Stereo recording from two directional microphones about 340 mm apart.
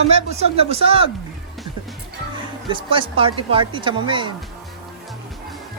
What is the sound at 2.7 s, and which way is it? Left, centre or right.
Speech, centre.